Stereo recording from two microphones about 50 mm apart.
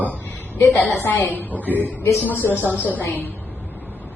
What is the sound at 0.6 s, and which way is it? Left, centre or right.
Speech, left.